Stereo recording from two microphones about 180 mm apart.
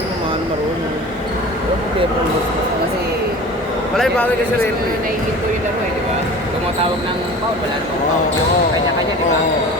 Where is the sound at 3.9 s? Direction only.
Centre (ahead or behind).